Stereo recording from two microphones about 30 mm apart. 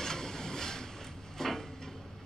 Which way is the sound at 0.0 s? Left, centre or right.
Centre.